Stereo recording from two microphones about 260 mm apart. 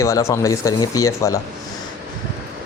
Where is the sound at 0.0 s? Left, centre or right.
Centre.